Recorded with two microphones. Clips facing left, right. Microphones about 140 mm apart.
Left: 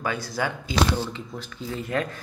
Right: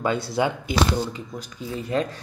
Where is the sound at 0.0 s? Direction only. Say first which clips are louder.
Right 5 dB; 25° right (ahead or behind).